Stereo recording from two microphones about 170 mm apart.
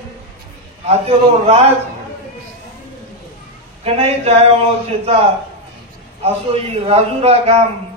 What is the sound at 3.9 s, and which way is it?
Speech, 40° right (ahead or behind).